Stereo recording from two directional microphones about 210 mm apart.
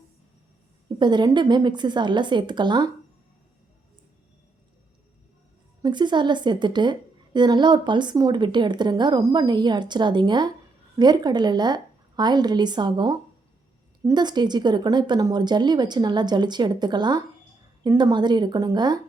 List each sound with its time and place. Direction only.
0.9 s speech: 20° right (ahead or behind)
5.8 s speech: 20° right (ahead or behind)